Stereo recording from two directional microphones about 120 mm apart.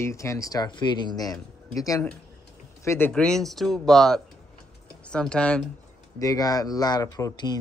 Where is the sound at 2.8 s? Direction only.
20° left (ahead or behind).